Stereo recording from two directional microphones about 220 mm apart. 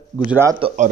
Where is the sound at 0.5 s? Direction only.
30° right (ahead or behind).